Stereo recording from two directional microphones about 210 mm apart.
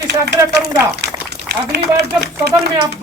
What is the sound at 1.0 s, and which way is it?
Speech, 50° right (ahead or behind).